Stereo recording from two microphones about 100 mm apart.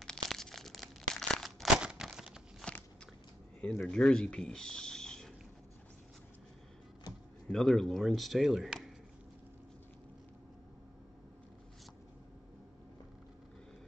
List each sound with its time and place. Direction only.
0.0 s crumpling: 5° left (ahead or behind)
2.6 s biting: 10° left (ahead or behind)
3.6 s speech: 10° left (ahead or behind)
7.4 s speech: 5° left (ahead or behind)